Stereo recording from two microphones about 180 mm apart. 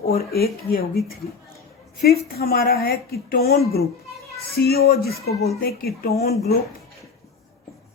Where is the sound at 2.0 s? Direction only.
60° left (ahead or behind).